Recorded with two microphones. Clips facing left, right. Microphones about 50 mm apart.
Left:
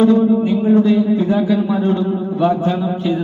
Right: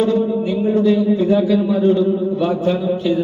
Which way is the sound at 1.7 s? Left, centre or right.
Left.